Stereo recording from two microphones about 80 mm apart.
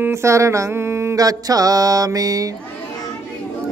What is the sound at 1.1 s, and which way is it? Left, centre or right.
Speech, right.